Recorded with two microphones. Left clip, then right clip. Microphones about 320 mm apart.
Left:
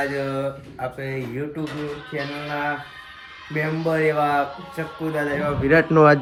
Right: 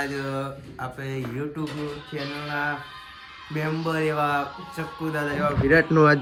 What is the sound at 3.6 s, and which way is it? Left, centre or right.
Speech, centre.